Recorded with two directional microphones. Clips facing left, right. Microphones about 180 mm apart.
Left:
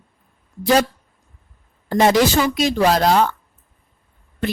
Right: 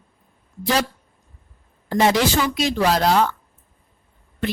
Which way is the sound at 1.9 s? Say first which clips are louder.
Left 3 dB; 45° left (ahead or behind).